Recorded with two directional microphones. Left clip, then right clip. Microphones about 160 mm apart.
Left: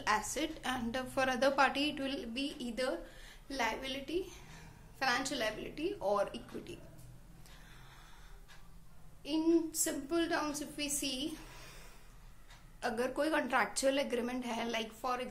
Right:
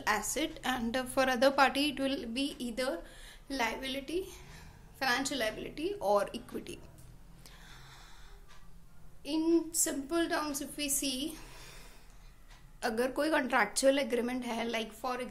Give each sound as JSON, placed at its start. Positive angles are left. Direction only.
{"t": 0.0, "sound": "a woman's voice", "side_deg": -30}
{"t": 9.2, "sound": "a woman's voice", "side_deg": -30}
{"t": 12.8, "sound": "a woman's voice", "side_deg": -35}